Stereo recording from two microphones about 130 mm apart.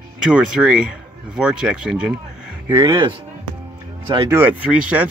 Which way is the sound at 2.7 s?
20° right (ahead or behind).